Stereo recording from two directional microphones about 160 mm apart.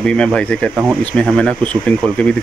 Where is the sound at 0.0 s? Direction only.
5° left (ahead or behind).